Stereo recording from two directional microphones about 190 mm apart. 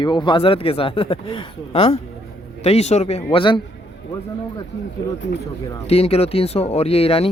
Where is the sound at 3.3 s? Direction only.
25° left (ahead or behind).